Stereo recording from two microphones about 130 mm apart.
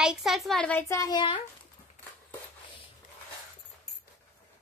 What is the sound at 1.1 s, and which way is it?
Speech, 40° left (ahead or behind).